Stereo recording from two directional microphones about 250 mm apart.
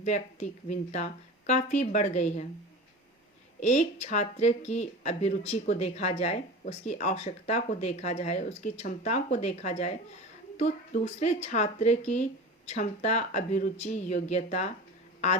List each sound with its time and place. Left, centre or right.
0.0 s speech: left
3.6 s speech: left